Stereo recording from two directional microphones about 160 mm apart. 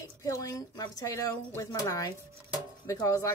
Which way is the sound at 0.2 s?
20° left (ahead or behind).